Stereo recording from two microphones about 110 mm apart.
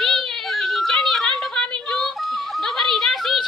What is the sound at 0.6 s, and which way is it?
Music, centre (ahead or behind).